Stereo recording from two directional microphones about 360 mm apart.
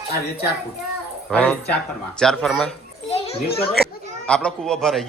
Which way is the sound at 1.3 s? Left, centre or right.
Centre.